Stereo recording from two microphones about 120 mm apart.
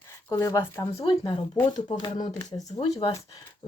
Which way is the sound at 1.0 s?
45° left (ahead or behind).